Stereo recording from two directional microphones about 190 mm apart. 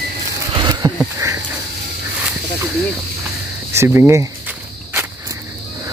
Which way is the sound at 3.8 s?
15° right (ahead or behind).